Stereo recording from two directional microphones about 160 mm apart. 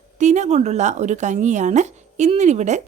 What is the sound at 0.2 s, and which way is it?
A woman's voice, 45° right (ahead or behind).